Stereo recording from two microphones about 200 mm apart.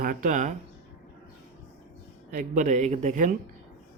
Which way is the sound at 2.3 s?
40° right (ahead or behind).